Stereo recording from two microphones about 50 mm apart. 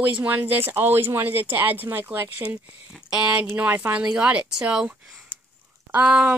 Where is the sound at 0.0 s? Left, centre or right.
Right.